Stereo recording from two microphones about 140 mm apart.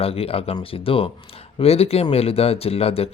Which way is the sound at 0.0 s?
45° left (ahead or behind).